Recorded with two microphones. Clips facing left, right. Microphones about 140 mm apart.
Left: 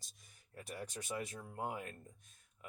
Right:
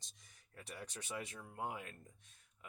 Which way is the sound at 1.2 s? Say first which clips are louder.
Left 1 dB; 40° left (ahead or behind).